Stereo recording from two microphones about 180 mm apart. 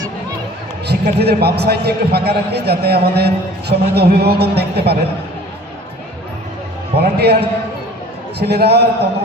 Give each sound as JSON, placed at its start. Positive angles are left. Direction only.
{"t": 0.9, "sound": "a man's voice", "side_deg": -65}
{"t": 6.9, "sound": "a man's voice", "side_deg": -65}
{"t": 8.4, "sound": "a man's voice", "side_deg": -65}